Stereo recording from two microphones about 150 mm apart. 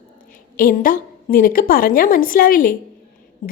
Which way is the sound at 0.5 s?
70° left (ahead or behind).